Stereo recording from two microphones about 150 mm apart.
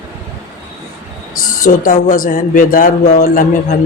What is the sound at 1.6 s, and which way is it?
A man's voice, 60° left (ahead or behind).